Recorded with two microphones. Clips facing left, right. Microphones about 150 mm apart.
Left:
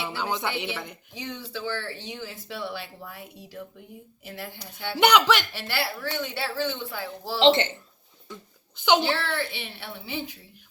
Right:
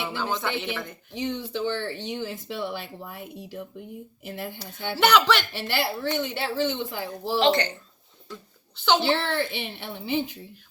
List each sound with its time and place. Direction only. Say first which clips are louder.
0.2 s speech: even; 15° left (ahead or behind)
1.2 s speech: right 6 dB; 20° right (ahead or behind)
4.9 s speech: even; 15° left (ahead or behind)
5.5 s speech: right 3 dB; 20° right (ahead or behind)
7.4 s a child's voice: left 4 dB; 25° left (ahead or behind)
9.0 s speech: right 3 dB; 20° right (ahead or behind)